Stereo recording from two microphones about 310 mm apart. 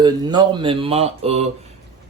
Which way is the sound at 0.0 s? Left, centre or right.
Centre.